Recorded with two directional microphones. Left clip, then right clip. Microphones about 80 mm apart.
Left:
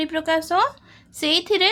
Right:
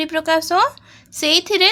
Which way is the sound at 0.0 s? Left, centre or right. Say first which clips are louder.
Right 4 dB; right.